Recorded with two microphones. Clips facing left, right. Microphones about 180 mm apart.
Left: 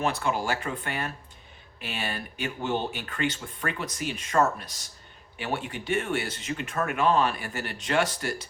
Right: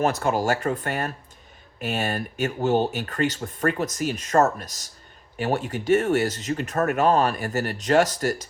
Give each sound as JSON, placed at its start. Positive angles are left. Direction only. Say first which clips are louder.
{"t": 0.0, "sound": "speech", "louder": "right 5 dB", "side_deg": -45}